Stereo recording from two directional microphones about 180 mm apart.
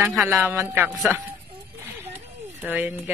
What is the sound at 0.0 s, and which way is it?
Speech, 5° right (ahead or behind).